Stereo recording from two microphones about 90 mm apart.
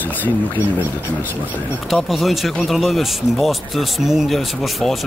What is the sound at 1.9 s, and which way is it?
Speech, centre (ahead or behind).